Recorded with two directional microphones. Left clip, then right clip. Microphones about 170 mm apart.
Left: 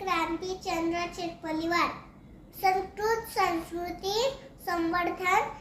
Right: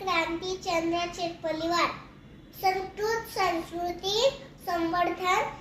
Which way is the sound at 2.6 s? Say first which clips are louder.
Left 1 dB; 20° left (ahead or behind).